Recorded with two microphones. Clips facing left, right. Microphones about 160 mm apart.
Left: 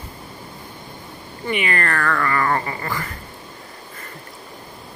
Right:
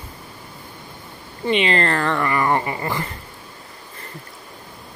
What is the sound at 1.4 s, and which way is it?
Speech, 25° right (ahead or behind).